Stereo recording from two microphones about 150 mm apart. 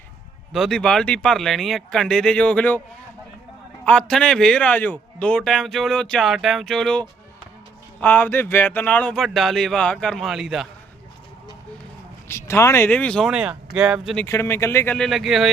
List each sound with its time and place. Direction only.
0.5 s a man's voice: centre (ahead or behind)
3.8 s a man's voice: 5° left (ahead or behind)
8.0 s a man's voice: 10° left (ahead or behind)
12.3 s speech: 20° left (ahead or behind)
13.3 s a man's voice: 5° right (ahead or behind)
14.3 s speech: 15° left (ahead or behind)
14.9 s a man's voice: centre (ahead or behind)